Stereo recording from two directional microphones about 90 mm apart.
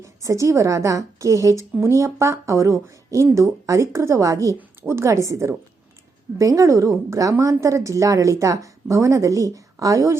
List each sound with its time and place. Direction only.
0.0 s a woman's voice: 35° right (ahead or behind)